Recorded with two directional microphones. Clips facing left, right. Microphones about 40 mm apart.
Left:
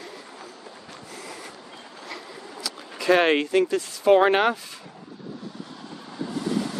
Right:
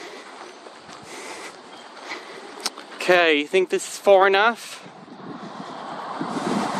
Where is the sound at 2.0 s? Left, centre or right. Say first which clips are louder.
Right 3 dB; right.